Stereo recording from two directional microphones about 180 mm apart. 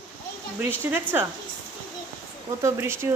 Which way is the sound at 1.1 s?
10° right (ahead or behind).